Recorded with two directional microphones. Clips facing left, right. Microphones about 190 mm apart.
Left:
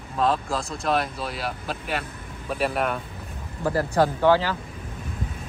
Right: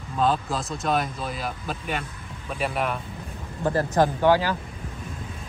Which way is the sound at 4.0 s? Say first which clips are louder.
Left 1 dB; 15° right (ahead or behind).